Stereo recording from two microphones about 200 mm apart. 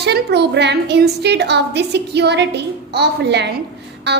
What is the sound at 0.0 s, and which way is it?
A woman's voice, 55° right (ahead or behind).